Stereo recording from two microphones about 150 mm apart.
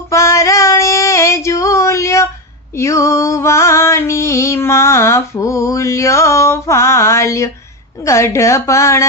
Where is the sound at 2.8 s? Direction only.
20° left (ahead or behind).